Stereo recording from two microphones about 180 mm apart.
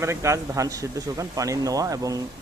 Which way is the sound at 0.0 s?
15° right (ahead or behind).